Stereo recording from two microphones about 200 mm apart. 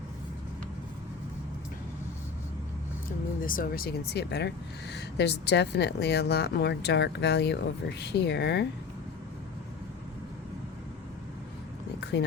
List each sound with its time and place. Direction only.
3.4 s speech: 45° left (ahead or behind)
12.1 s speech: 60° left (ahead or behind)